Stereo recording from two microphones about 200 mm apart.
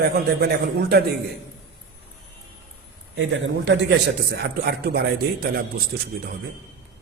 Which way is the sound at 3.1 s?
65° right (ahead or behind).